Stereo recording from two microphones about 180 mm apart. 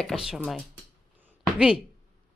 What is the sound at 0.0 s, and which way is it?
Speech, centre (ahead or behind).